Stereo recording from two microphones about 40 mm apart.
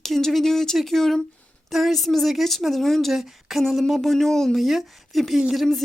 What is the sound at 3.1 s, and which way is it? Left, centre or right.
Speech, centre.